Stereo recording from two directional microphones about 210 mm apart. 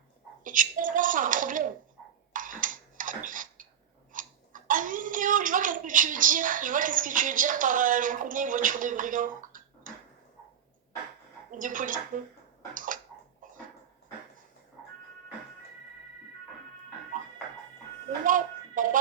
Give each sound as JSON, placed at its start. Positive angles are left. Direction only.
{"t": 0.4, "sound": "a woman's voice", "side_deg": -40}
{"t": 2.3, "sound": "a sound", "side_deg": -40}
{"t": 4.1, "sound": "a child's voice", "side_deg": -40}
{"t": 11.5, "sound": "a woman's voice", "side_deg": -40}
{"t": 12.7, "sound": "bathtub", "side_deg": -40}
{"t": 18.3, "sound": "a sound", "side_deg": -40}